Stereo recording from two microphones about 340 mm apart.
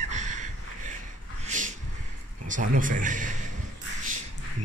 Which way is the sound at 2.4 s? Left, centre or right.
Right.